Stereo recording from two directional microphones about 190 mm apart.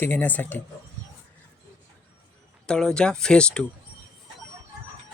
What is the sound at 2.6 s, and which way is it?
Speech, 5° left (ahead or behind).